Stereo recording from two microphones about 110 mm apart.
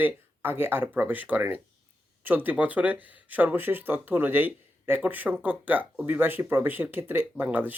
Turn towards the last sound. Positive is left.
turn(degrees=-15)  # may be behind; listen again after turning